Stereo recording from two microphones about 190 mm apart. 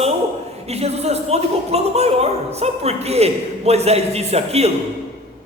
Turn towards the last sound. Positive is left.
turn(degrees=-35)  # may be behind; listen again after turning